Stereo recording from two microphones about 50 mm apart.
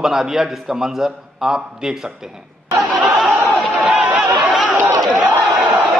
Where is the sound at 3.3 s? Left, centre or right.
Right.